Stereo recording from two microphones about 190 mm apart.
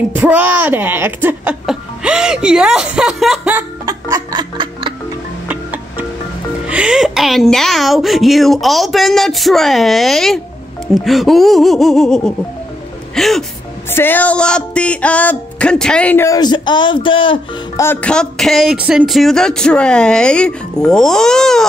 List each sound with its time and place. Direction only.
0.1 s speech: 10° right (ahead or behind)
3.8 s music: 20° right (ahead or behind)
5.5 s music: 10° right (ahead or behind)
6.7 s speech: 5° right (ahead or behind)
13.8 s music: 10° left (ahead or behind); by 17.4 s 25° left (ahead or behind)
17.7 s speech: 10° left (ahead or behind)